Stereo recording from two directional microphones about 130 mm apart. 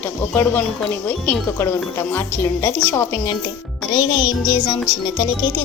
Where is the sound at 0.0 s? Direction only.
15° left (ahead or behind).